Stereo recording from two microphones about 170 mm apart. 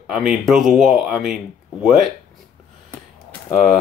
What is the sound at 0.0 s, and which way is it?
Speech, 5° right (ahead or behind).